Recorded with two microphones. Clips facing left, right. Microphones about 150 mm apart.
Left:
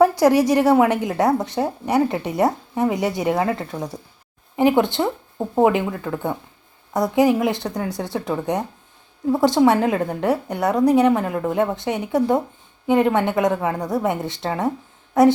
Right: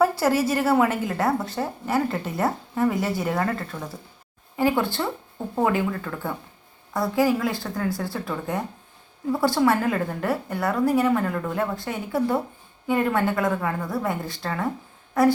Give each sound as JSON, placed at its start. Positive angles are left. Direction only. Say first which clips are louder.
{"t": 0.0, "sound": "a woman's voice", "louder": "left 6 dB", "side_deg": 15}